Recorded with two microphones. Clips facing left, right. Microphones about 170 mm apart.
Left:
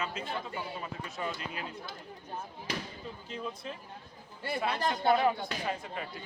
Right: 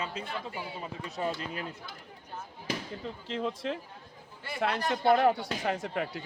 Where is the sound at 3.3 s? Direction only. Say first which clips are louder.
Right 8 dB; 90° right.